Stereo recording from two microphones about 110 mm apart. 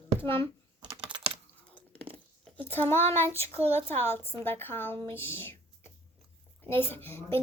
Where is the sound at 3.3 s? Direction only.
70° right (ahead or behind).